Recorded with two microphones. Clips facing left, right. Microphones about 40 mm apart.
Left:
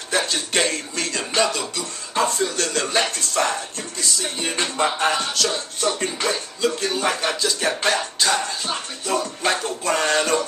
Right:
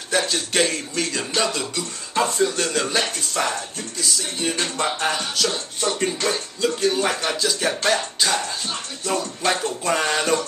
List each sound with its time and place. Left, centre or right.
0.1 s speech: centre
5.3 s speech: centre